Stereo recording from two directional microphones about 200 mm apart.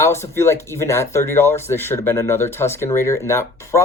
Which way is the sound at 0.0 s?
15° left (ahead or behind).